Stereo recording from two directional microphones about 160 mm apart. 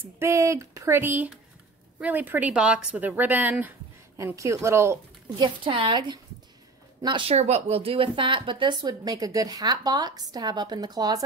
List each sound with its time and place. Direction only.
0.2 s a woman's voice: 20° right (ahead or behind)
5.4 s speech: 30° right (ahead or behind)